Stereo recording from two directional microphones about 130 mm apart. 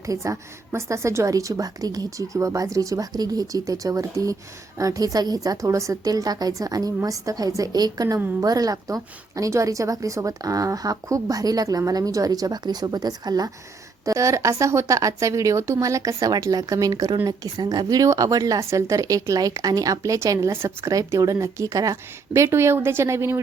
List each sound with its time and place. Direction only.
0.0 s a woman's voice: 25° right (ahead or behind)